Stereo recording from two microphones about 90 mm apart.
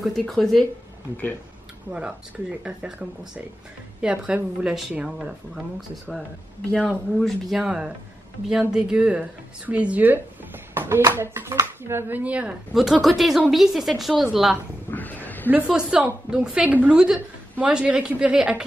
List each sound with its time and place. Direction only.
0.0 s a woman's voice: centre (ahead or behind)
1.9 s a woman's voice: 15° right (ahead or behind)
6.7 s speech: 10° left (ahead or behind)
7.2 s a woman's voice: centre (ahead or behind)
13.0 s a woman's voice: centre (ahead or behind)
14.9 s a sound: 20° left (ahead or behind)
15.5 s a woman's voice: 10° right (ahead or behind)